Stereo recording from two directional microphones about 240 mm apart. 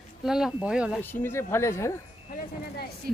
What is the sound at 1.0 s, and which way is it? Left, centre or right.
A woman's voice, centre.